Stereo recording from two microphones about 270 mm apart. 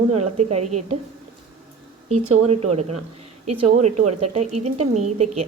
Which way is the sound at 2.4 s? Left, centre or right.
Right.